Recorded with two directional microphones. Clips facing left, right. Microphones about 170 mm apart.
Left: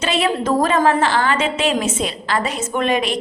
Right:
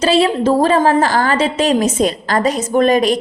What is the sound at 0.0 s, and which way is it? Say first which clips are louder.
A woman's voice: right 6 dB; 30° right (ahead or behind).